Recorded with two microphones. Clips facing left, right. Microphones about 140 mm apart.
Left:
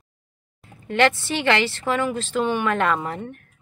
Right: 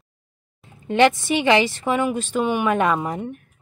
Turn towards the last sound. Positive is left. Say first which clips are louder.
# right 3 dB
turn(degrees=-15)  # may be behind; listen again after turning